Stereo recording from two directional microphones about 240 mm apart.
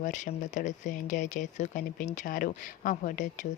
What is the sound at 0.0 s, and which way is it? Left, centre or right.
Speech, left.